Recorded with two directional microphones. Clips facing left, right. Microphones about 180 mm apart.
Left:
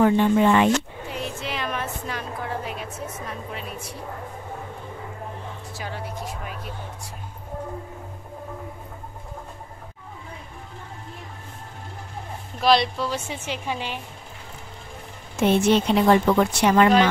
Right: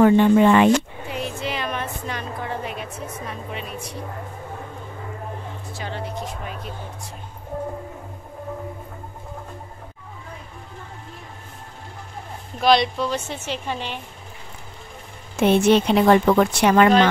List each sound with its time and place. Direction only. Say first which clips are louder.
0.0 s speech: right 4 dB; 75° right (ahead or behind)
1.1 s a woman's voice: right 3 dB; centre (ahead or behind)
5.8 s a woman's voice: right 3 dB; 10° left (ahead or behind)
12.5 s a woman's voice: right 2 dB; centre (ahead or behind)
15.4 s a woman's voice: right 3 dB; 65° right (ahead or behind)